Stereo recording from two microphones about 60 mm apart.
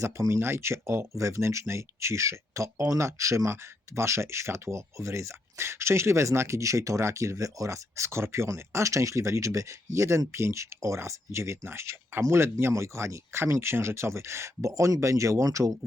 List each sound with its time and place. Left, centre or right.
0.0 s speech: right